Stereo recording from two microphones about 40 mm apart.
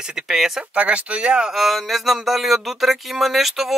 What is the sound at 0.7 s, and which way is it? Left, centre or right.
Speech, right.